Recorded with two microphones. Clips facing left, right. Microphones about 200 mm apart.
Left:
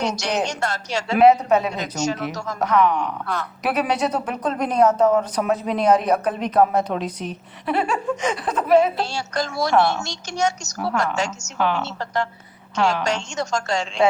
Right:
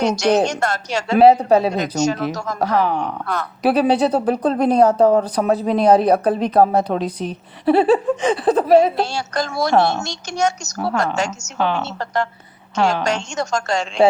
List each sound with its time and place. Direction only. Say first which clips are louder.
0.0 s a woman's voice: right 7 dB; 50° right (ahead or behind)
1.1 s a woman's voice: right 3 dB; 30° right (ahead or behind)
1.7 s a woman's voice: right 5 dB; 50° right (ahead or behind); by 8.9 s 35° right (ahead or behind)
9.0 s a woman's voice: right 3 dB; 50° right (ahead or behind)
11.5 s a woman's voice: right 2 dB; 30° right (ahead or behind)
11.8 s a woman's voice: right 3 dB; 50° right (ahead or behind)
12.7 s a woman's voice: right 2 dB; 25° right (ahead or behind)
13.1 s a woman's voice: right 3 dB; 50° right (ahead or behind)